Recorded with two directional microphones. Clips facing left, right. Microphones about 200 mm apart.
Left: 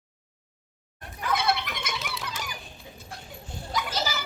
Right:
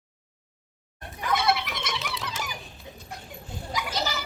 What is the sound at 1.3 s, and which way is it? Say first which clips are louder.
Fowl: right 2 dB; centre (ahead or behind).